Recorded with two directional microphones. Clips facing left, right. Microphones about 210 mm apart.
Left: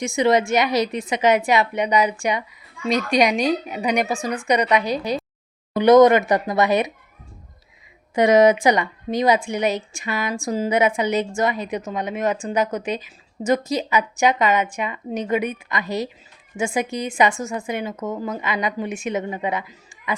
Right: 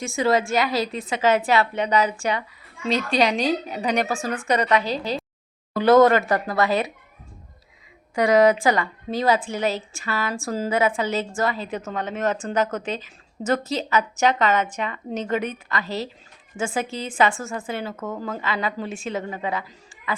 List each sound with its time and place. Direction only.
0.0 s a woman's voice: 15° left (ahead or behind)
8.1 s a woman's voice: 20° left (ahead or behind)